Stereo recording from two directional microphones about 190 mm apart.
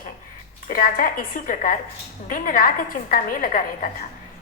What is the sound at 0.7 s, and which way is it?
A woman's voice, 45° left (ahead or behind).